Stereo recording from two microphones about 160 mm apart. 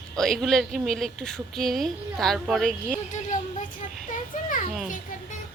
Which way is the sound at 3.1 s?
50° left (ahead or behind).